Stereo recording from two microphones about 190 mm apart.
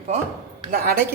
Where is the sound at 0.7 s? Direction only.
50° right (ahead or behind).